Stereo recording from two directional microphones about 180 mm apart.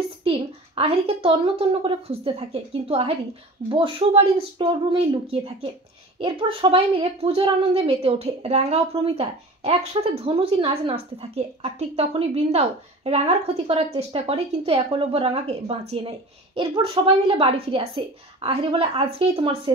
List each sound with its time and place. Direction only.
0.2 s a woman's voice: 30° right (ahead or behind)